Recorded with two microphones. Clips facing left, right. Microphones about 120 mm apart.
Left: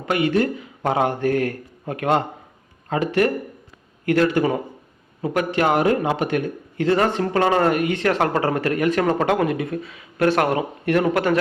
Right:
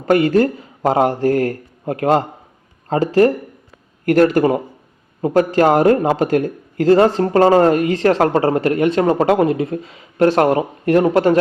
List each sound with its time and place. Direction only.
0.0 s speech: 40° right (ahead or behind)
4.1 s speech: 45° right (ahead or behind); by 11.3 s 30° right (ahead or behind)